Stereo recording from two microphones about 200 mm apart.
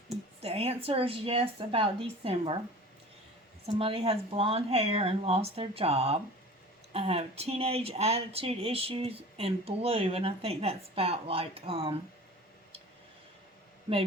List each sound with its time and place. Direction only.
0.4 s speech: 30° right (ahead or behind)
3.8 s speech: 30° right (ahead or behind)